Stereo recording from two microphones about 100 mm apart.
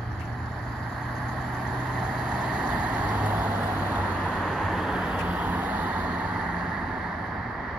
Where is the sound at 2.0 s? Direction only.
10° right (ahead or behind).